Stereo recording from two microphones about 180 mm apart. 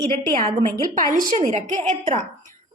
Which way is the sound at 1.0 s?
50° right (ahead or behind).